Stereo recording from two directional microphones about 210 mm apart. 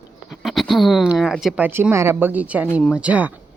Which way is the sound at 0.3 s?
Centre (ahead or behind).